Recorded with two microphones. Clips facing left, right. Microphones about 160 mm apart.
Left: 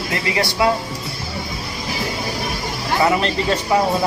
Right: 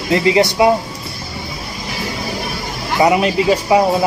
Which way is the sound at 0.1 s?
20° right (ahead or behind).